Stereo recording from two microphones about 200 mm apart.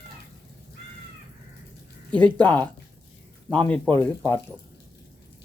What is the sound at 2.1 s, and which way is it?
Speech, 5° left (ahead or behind).